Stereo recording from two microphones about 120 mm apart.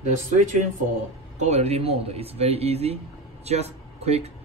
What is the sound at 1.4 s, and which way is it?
Speech, 65° right (ahead or behind).